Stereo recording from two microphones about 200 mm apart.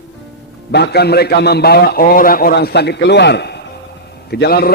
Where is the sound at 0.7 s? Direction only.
55° left (ahead or behind).